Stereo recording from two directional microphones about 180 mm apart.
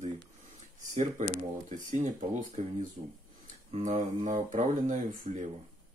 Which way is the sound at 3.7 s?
40° right (ahead or behind).